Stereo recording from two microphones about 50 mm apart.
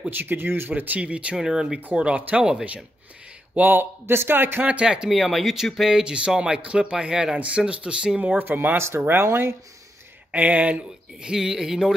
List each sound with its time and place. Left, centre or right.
0.1 s speech: right
1.3 s speech: centre
2.0 s speech: right
3.5 s speech: right
4.0 s speech: right
4.8 s speech: centre
5.1 s speech: centre
8.4 s speech: right
8.7 s speech: right
10.3 s speech: right
11.2 s speech: centre